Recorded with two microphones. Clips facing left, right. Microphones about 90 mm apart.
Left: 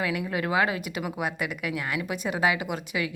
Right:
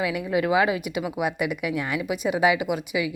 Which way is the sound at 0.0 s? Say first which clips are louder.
Right 4 dB; 15° right (ahead or behind).